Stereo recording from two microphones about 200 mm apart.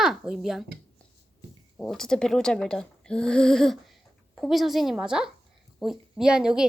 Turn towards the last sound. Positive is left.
turn(degrees=-5)  # may be behind; listen again after turning